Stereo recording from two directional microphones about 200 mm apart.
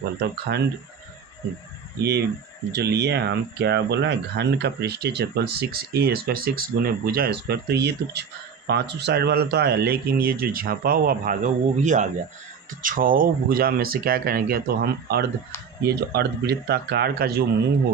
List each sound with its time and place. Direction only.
0.2 s speech: 55° right (ahead or behind)
2.0 s speech: 55° right (ahead or behind)